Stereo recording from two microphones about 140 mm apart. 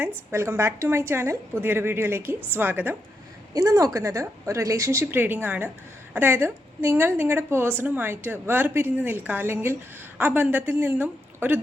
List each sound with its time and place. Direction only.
0.3 s a woman's voice: 20° right (ahead or behind)
3.5 s a woman's voice: 25° right (ahead or behind)